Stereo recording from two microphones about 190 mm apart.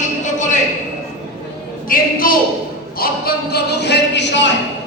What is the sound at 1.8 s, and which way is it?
A woman's voice, 50° left (ahead or behind).